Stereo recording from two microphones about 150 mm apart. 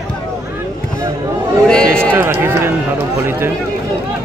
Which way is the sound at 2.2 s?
15° right (ahead or behind).